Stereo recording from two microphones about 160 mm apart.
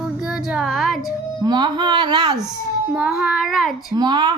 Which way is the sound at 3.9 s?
25° right (ahead or behind).